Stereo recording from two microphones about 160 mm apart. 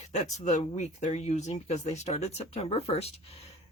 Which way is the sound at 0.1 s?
45° left (ahead or behind).